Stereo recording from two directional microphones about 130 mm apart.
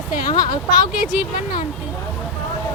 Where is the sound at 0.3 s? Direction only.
30° left (ahead or behind).